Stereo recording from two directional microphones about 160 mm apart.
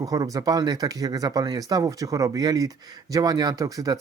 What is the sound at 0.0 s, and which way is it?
Speech, 20° right (ahead or behind).